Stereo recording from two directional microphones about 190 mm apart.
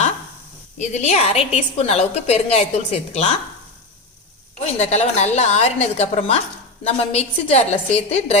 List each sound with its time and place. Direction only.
0.8 s a woman's voice: 35° left (ahead or behind)
4.6 s a woman's voice: 35° left (ahead or behind)